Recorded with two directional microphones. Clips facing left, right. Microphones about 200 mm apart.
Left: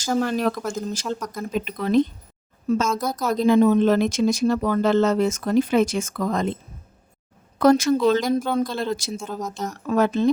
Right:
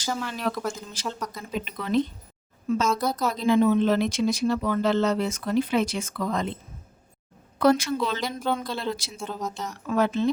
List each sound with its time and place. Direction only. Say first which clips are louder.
0.1 s speech: left 7 dB; 45° left (ahead or behind)
1.0 s speech: left 4 dB; centre (ahead or behind)
1.5 s speech: left 5 dB; 45° left (ahead or behind)
7.6 s speech: left 5 dB; 45° left (ahead or behind)